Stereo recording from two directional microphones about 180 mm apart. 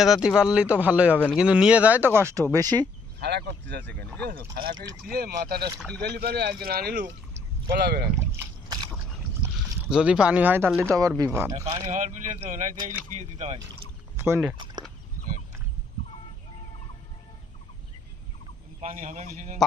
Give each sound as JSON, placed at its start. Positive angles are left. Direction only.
{"t": 0.0, "sound": "speech", "side_deg": -5}
{"t": 3.2, "sound": "speech", "side_deg": -65}
{"t": 4.3, "sound": "speech", "side_deg": -55}
{"t": 8.2, "sound": "rowboat", "side_deg": -15}
{"t": 9.9, "sound": "speech", "side_deg": -5}
{"t": 11.5, "sound": "a man's voice", "side_deg": -35}
{"t": 14.2, "sound": "speech", "side_deg": -15}
{"t": 18.8, "sound": "a man's voice", "side_deg": -40}